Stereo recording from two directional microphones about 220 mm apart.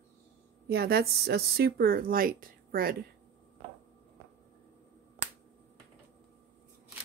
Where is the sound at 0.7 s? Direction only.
45° right (ahead or behind).